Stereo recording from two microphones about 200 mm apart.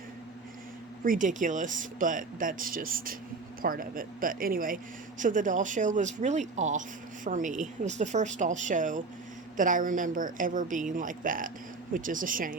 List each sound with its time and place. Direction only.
1.0 s a woman's voice: 40° right (ahead or behind)